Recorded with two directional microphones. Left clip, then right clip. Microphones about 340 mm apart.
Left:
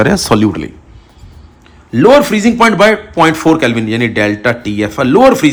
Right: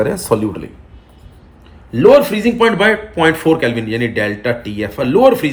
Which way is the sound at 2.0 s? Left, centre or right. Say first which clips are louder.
Left 2 dB; centre.